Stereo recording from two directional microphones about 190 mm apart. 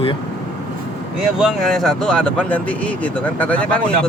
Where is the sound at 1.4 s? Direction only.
Centre (ahead or behind).